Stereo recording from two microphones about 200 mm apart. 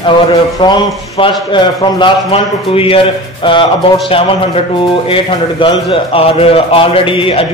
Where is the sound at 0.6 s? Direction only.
25° left (ahead or behind).